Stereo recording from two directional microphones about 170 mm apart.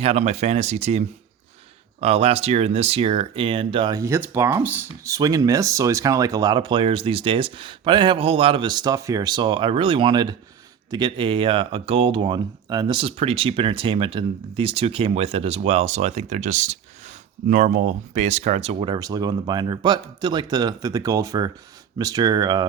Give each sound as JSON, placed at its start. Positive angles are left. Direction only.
{"t": 0.0, "sound": "speech", "side_deg": -40}
{"t": 4.0, "sound": "speech", "side_deg": -15}
{"t": 18.9, "sound": "speech", "side_deg": -25}